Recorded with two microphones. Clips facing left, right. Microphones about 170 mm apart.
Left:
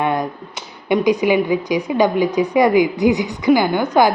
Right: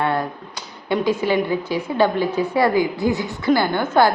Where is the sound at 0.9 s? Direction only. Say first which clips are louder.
Left 4 dB; 15° left (ahead or behind).